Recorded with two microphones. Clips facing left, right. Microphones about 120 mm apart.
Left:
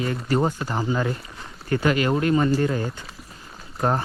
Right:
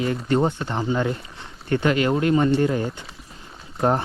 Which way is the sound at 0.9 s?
30° right (ahead or behind).